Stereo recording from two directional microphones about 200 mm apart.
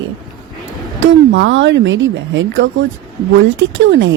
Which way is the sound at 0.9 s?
70° right (ahead or behind).